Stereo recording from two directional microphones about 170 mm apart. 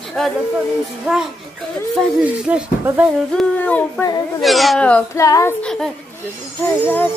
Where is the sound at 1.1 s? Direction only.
5° right (ahead or behind).